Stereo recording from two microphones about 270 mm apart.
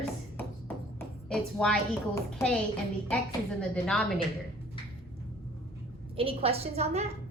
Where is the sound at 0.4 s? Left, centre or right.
Centre.